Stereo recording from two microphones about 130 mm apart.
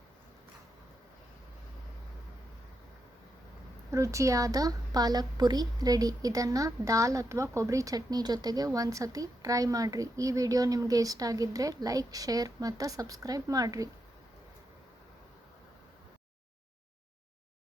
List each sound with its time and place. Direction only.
3.9 s a woman's voice: 25° right (ahead or behind)